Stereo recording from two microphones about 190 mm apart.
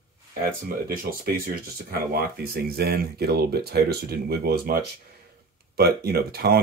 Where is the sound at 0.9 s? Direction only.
50° right (ahead or behind).